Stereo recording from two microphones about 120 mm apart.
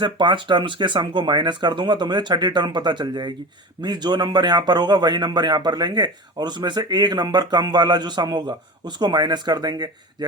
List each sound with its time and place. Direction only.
0.0 s a man's voice: 40° right (ahead or behind)